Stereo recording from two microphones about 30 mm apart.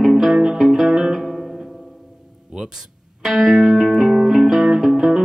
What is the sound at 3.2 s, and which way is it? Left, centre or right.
Music, centre.